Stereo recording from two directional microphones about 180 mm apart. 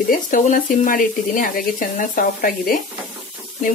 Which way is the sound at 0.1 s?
45° left (ahead or behind).